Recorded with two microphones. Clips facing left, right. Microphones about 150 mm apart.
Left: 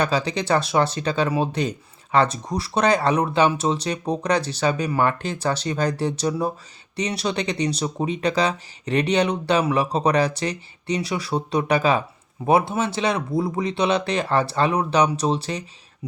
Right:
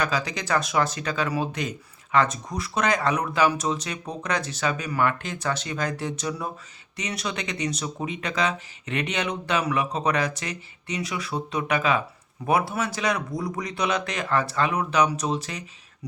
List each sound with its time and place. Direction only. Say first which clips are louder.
0.0 s speech: left 5 dB; 30° left (ahead or behind)